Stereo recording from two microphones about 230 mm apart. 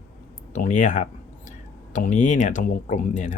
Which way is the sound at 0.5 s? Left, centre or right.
Left.